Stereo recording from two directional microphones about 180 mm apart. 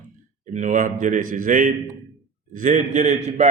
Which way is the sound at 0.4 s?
45° right (ahead or behind).